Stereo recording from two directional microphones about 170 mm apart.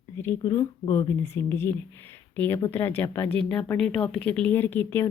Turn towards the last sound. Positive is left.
turn(degrees=15)  # may be behind; listen again after turning